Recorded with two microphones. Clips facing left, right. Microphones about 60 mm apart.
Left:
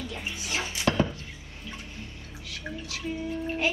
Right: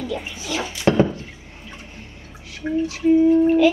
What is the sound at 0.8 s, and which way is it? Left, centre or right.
Music, right.